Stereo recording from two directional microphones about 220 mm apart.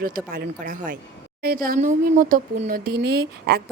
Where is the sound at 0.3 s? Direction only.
40° right (ahead or behind).